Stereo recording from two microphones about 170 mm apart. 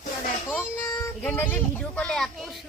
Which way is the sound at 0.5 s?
10° left (ahead or behind).